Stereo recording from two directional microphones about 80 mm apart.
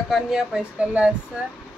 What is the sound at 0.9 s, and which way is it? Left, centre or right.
Speech, centre.